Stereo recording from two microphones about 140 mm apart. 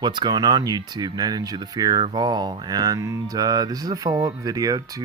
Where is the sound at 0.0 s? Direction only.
35° right (ahead or behind).